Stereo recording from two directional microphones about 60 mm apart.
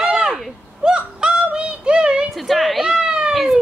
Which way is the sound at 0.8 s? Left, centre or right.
Centre.